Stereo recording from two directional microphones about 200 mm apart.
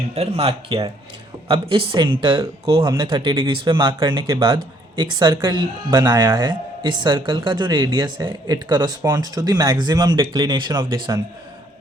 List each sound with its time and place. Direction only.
0.1 s speech: 30° right (ahead or behind)